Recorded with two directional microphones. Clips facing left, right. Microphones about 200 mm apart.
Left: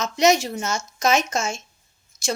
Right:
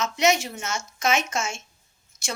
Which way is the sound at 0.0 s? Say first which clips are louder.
Left 4 dB; 35° left (ahead or behind).